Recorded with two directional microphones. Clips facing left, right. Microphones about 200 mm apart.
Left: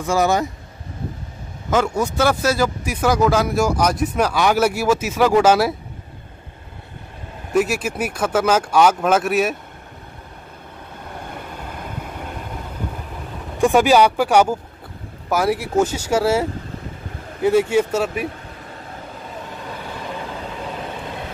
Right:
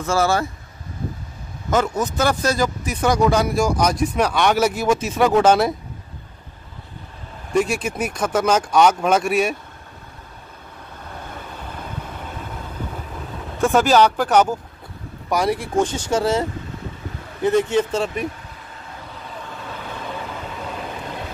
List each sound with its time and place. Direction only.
0.0 s speech: 15° left (ahead or behind)
1.7 s speech: 10° left (ahead or behind)
7.5 s speech: 5° left (ahead or behind)
13.6 s speech: 15° left (ahead or behind)